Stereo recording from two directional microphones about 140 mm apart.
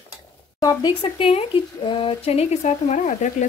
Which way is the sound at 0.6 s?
30° left (ahead or behind).